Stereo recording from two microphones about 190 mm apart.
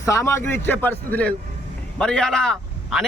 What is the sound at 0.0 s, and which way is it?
A man's voice, 15° left (ahead or behind).